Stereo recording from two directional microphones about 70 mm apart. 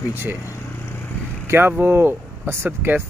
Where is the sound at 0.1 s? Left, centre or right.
Right.